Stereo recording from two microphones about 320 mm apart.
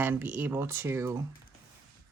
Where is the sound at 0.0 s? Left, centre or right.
Centre.